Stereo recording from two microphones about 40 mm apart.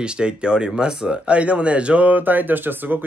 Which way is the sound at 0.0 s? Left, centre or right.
Right.